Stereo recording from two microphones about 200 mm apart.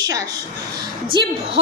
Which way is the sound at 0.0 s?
20° right (ahead or behind).